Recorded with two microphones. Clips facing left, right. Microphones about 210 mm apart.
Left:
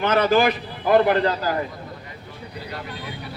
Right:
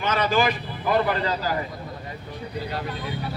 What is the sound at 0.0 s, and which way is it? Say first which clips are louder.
Speech: left 5 dB; 60° left (ahead or behind).